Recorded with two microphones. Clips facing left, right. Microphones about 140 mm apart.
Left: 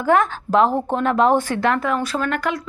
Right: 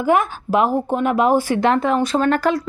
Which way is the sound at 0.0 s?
10° right (ahead or behind).